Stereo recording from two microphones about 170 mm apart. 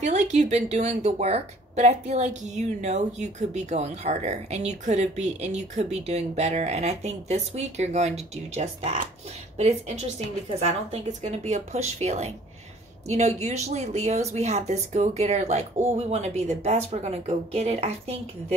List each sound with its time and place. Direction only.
0.0 s speech: 45° right (ahead or behind)